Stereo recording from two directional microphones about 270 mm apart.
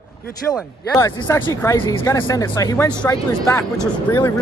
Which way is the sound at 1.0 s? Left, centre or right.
Centre.